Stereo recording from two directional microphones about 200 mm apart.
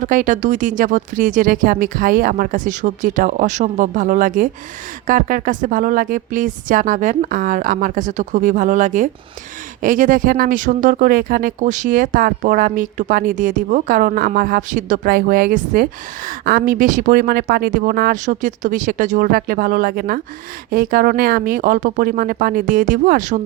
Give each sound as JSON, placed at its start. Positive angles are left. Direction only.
{"t": 0.0, "sound": "speech", "side_deg": -40}